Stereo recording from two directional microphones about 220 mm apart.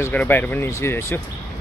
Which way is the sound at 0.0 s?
10° left (ahead or behind).